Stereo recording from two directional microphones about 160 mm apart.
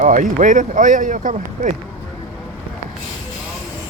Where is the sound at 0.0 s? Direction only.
50° right (ahead or behind).